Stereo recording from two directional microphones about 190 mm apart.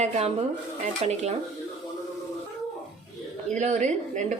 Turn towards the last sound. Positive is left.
turn(degrees=-40)  # may be behind; listen again after turning